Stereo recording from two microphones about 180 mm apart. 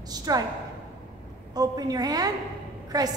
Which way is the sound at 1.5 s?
20° right (ahead or behind).